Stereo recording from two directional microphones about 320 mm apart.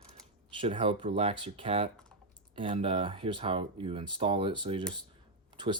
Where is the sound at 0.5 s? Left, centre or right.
Centre.